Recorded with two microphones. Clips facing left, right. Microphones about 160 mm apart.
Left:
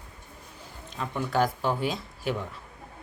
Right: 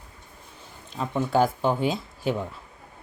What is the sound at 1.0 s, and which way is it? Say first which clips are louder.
Speech: right 4 dB; 25° right (ahead or behind).